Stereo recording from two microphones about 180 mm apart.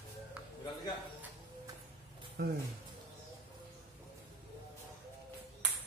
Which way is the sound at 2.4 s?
60° right (ahead or behind).